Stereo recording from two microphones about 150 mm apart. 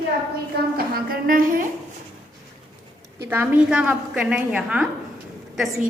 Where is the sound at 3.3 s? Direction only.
10° right (ahead or behind).